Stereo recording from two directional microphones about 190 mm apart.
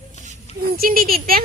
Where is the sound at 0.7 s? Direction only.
50° right (ahead or behind).